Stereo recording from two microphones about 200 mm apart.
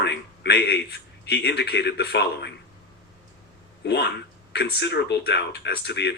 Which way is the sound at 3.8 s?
55° left (ahead or behind).